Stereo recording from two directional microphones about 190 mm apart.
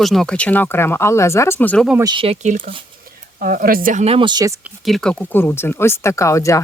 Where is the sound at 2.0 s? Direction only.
25° right (ahead or behind).